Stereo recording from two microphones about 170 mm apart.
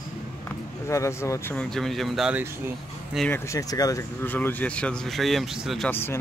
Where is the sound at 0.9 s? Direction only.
15° left (ahead or behind).